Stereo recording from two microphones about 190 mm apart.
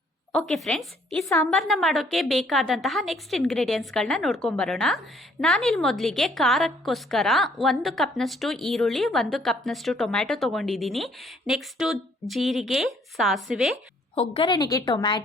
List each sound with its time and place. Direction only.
0.3 s a woman's voice: centre (ahead or behind)
14.2 s a woman's voice: 30° left (ahead or behind)